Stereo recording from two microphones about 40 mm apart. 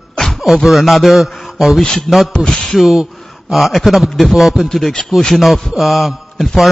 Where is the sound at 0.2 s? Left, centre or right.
Centre.